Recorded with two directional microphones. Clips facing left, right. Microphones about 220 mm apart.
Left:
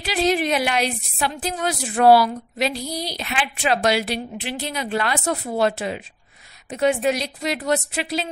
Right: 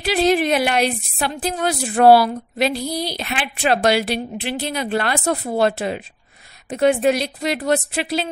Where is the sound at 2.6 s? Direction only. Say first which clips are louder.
Right 4 dB; 55° right (ahead or behind).